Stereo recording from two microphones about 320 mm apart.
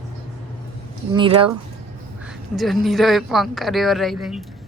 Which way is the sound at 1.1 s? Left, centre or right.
Centre.